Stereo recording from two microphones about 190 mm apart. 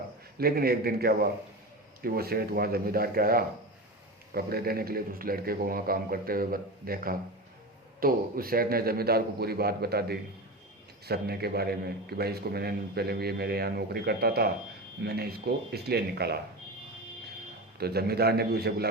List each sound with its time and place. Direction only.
0.3 s a man's voice: 50° right (ahead or behind)
17.7 s a man's voice: 55° right (ahead or behind)